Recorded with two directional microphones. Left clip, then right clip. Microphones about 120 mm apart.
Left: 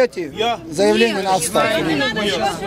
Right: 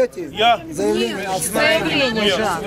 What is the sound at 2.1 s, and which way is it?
Speech, centre (ahead or behind).